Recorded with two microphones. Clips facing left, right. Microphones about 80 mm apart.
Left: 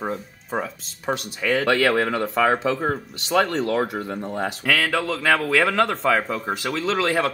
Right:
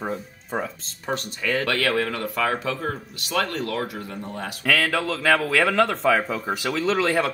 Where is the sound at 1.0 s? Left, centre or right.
Centre.